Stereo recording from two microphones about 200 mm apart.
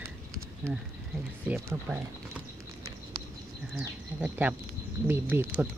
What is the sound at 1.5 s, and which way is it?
Speech, 10° right (ahead or behind).